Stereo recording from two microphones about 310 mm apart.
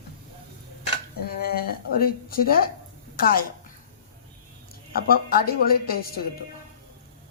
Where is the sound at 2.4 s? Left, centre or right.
Left.